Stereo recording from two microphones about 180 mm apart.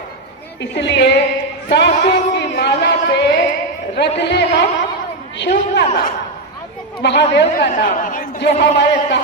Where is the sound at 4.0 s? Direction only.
70° left (ahead or behind).